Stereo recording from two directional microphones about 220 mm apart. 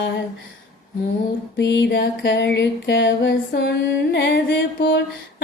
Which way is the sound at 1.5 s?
55° left (ahead or behind).